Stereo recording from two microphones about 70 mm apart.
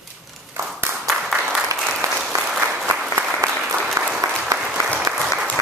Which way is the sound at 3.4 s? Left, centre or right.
Right.